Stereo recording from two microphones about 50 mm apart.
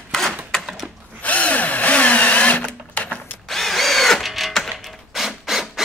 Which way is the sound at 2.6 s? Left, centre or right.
Left.